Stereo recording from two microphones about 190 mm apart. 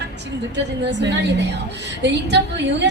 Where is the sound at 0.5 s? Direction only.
65° right (ahead or behind).